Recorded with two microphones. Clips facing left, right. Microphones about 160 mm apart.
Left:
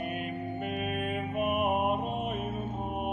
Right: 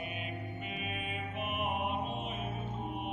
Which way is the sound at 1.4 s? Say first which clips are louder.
Left 8 dB; 50° left (ahead or behind).